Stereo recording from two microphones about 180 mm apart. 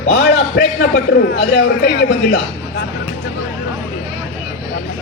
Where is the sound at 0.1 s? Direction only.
80° left.